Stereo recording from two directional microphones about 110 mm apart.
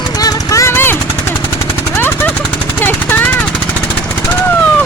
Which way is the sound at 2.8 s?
20° left (ahead or behind).